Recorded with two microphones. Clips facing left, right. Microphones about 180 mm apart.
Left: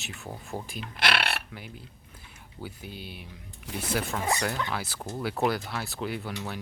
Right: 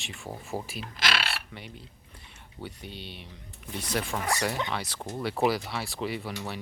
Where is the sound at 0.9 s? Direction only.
60° left (ahead or behind).